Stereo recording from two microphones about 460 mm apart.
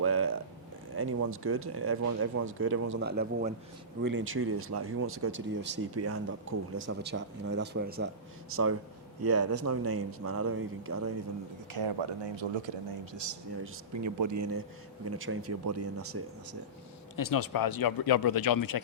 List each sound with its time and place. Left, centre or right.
0.0 s speech: right
11.7 s speech: right
13.9 s speech: right
17.2 s speech: left